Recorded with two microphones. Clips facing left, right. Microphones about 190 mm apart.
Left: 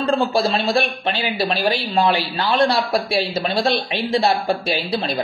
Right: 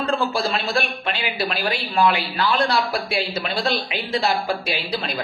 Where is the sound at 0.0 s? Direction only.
30° left (ahead or behind).